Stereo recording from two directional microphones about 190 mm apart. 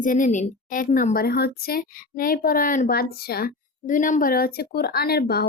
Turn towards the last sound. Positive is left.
turn(degrees=55)  # may be behind; listen again after turning